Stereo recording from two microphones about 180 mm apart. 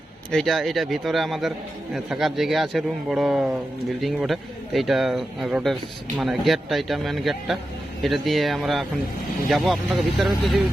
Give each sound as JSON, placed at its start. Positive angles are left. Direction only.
{"t": 0.3, "sound": "a man's voice", "side_deg": 0}